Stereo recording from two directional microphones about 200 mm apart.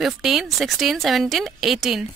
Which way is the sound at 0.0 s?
Centre (ahead or behind).